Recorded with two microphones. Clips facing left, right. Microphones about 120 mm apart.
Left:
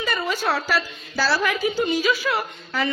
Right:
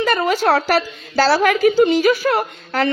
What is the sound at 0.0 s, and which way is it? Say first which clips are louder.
A woman's voice: right 8 dB; 70° right (ahead or behind).